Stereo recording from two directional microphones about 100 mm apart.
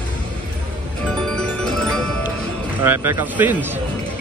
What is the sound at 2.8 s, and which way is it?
Speech, 20° right (ahead or behind).